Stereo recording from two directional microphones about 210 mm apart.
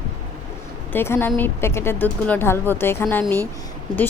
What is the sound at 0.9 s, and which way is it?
Speech, 10° left (ahead or behind).